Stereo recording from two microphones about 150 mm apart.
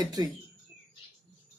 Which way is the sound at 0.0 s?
25° right (ahead or behind).